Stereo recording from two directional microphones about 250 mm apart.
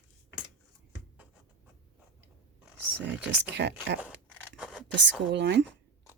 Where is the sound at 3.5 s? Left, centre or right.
Right.